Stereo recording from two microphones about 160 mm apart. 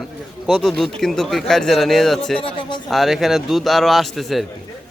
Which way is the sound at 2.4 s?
30° left (ahead or behind).